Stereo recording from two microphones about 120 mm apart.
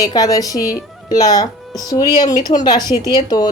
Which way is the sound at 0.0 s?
30° left (ahead or behind).